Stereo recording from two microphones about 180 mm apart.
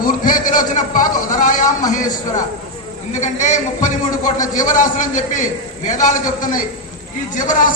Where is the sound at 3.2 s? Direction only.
45° left (ahead or behind).